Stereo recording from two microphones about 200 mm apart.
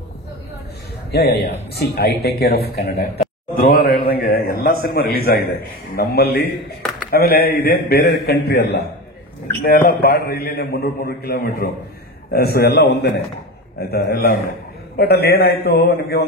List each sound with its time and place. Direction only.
1.1 s a man's voice: 55° left (ahead or behind)